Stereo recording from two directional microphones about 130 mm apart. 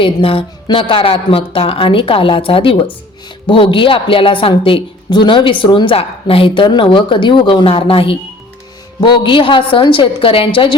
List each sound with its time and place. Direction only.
0.0 s a woman's voice: 45° left (ahead or behind)